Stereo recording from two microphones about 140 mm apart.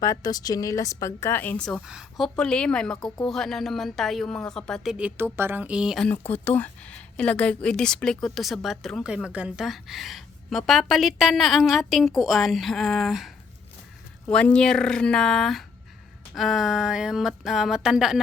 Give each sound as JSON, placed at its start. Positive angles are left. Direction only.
{"t": 0.0, "sound": "a woman's voice", "side_deg": 25}
{"t": 1.9, "sound": "a woman's voice", "side_deg": 0}
{"t": 6.1, "sound": "a woman's voice", "side_deg": 10}